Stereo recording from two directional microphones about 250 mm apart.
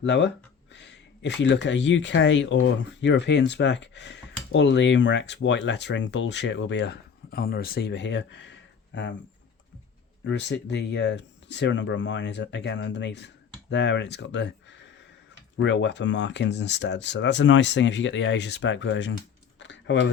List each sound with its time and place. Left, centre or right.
0.0 s speech: left
10.2 s speech: left
19.5 s a sound: left